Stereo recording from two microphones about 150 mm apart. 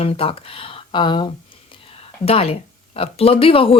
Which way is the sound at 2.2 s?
40° left (ahead or behind).